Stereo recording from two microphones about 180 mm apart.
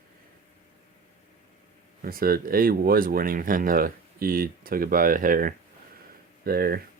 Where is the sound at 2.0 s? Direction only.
55° right (ahead or behind).